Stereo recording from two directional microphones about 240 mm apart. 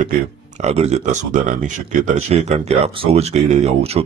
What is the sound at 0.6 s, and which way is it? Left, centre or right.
Speech, right.